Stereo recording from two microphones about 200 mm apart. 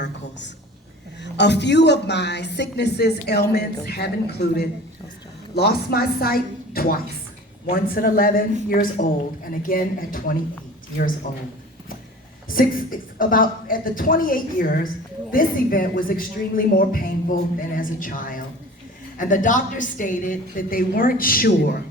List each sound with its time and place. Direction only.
0.0 s a sound: 60° left (ahead or behind)
1.2 s speech: 60° left (ahead or behind); by 10.3 s 45° left (ahead or behind)
12.5 s speech: 45° left (ahead or behind)